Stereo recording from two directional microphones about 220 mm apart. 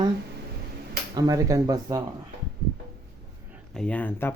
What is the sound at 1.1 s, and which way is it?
Speech, 15° right (ahead or behind).